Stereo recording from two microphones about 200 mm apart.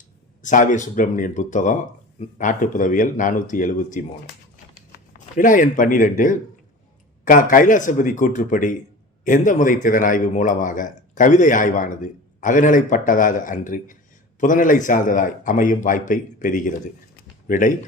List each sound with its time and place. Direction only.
0.4 s speech: 40° left (ahead or behind)
5.4 s speech: 40° left (ahead or behind)